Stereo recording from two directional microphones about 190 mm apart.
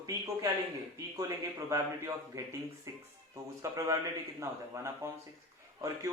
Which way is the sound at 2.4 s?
15° right (ahead or behind).